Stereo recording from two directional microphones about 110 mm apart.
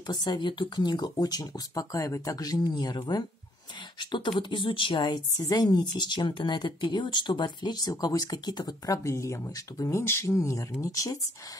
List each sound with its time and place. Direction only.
0.0 s a woman's voice: 40° left (ahead or behind)